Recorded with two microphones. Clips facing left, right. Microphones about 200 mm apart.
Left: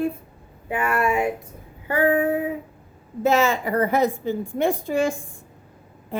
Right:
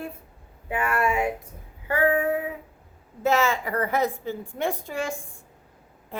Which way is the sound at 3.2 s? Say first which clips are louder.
Left 3 dB; 20° left (ahead or behind).